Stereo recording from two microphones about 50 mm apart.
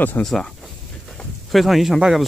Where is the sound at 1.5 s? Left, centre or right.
Centre.